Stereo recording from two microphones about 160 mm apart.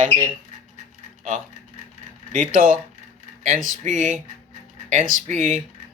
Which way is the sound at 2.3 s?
55° right (ahead or behind).